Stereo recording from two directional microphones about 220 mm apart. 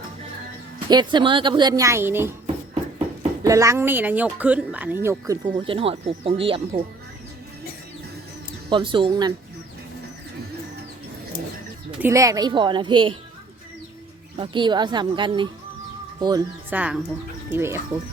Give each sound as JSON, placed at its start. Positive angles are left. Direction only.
{"t": 0.9, "sound": "a woman's voice", "side_deg": -20}
{"t": 3.4, "sound": "speech", "side_deg": -15}
{"t": 8.7, "sound": "a woman's voice", "side_deg": -20}
{"t": 11.9, "sound": "a woman's voice", "side_deg": -10}
{"t": 14.3, "sound": "a woman's voice", "side_deg": -20}